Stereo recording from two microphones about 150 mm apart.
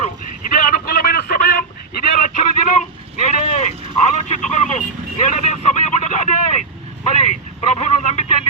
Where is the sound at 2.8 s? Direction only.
50° left (ahead or behind).